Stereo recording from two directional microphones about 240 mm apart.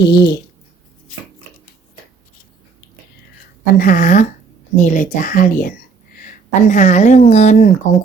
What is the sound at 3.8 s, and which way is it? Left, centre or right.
A woman's voice, left.